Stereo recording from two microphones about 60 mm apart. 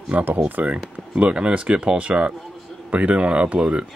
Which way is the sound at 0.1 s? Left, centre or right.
Right.